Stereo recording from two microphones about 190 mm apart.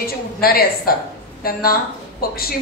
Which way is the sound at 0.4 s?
55° left (ahead or behind).